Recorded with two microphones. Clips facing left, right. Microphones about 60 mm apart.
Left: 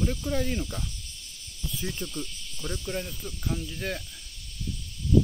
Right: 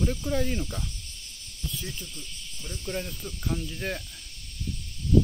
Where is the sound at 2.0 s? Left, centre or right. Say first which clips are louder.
Left 8 dB; left.